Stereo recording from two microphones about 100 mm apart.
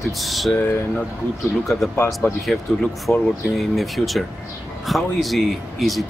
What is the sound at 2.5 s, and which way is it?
Speech, 5° left (ahead or behind).